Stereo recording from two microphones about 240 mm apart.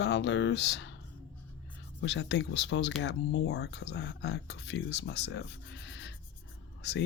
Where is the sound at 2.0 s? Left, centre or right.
Left.